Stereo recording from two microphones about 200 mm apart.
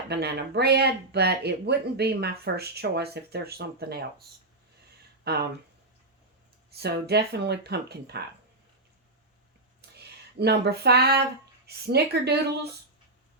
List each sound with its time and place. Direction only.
0.1 s speech: 55° right (ahead or behind)
6.7 s speech: 55° right (ahead or behind)
10.3 s speech: 55° right (ahead or behind)